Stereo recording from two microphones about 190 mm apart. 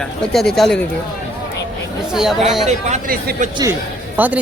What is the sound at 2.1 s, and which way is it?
Speech, centre (ahead or behind).